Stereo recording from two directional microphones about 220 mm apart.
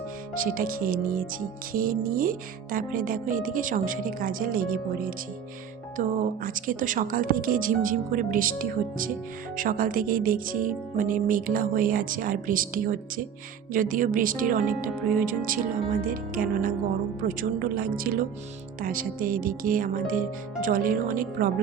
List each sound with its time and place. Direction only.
0.3 s speech: 40° right (ahead or behind)
9.6 s speech: 40° right (ahead or behind)